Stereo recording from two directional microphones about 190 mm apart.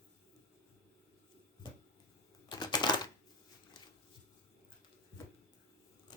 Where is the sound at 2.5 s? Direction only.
20° left (ahead or behind).